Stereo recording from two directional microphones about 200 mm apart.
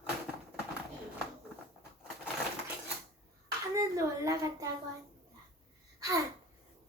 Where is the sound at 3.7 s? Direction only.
15° right (ahead or behind).